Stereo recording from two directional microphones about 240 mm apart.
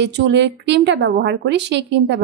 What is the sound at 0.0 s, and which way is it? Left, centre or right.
A woman's voice, right.